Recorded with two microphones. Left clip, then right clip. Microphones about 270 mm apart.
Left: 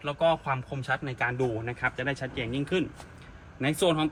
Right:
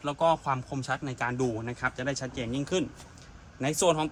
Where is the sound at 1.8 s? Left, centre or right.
Right.